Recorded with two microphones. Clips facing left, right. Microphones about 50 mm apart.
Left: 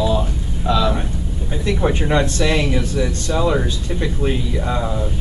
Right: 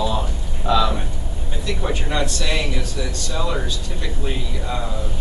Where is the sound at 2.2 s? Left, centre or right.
Left.